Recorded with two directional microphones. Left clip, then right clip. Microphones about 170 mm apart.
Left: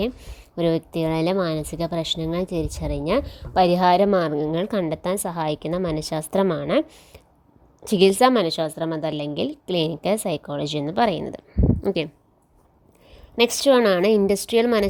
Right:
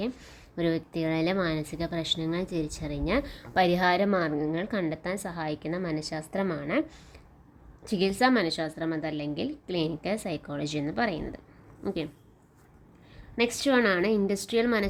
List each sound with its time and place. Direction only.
0.2 s a woman's voice: 25° left (ahead or behind); by 12.0 s 45° left (ahead or behind)
13.3 s a woman's voice: 50° left (ahead or behind)